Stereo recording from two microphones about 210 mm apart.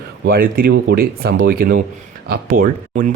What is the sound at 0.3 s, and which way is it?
Speech, 45° right (ahead or behind).